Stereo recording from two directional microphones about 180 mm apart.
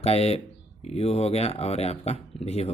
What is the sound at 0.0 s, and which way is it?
Speech, 35° left (ahead or behind).